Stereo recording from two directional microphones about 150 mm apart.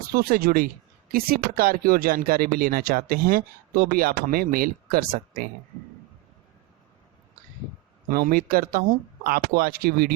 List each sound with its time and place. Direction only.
0.1 s speech: 90° right; by 5.5 s 75° right (ahead or behind)
8.1 s speech: 70° right (ahead or behind)